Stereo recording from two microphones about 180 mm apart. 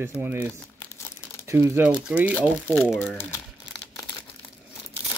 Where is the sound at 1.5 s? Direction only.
10° right (ahead or behind).